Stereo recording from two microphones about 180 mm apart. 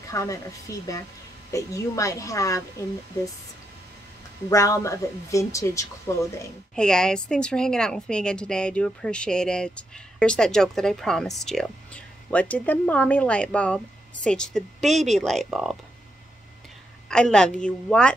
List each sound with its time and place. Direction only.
0.1 s a woman's voice: 20° left (ahead or behind)
4.5 s a woman's voice: 20° left (ahead or behind)
6.7 s a woman's voice: 5° left (ahead or behind)
17.1 s a woman's voice: 5° left (ahead or behind)